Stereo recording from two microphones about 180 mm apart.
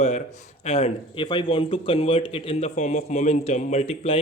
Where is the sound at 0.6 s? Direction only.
35° left (ahead or behind).